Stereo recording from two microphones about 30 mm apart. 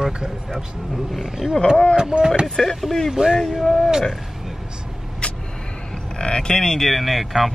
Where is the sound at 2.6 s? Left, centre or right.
Centre.